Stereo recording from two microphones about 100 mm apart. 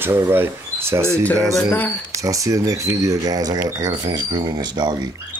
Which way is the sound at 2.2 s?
35° right (ahead or behind).